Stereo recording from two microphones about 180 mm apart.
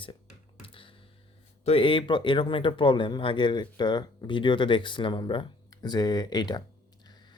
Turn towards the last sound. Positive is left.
turn(degrees=25)  # may be behind; listen again after turning